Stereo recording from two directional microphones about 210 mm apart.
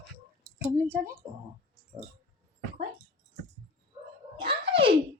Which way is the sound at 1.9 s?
30° right (ahead or behind).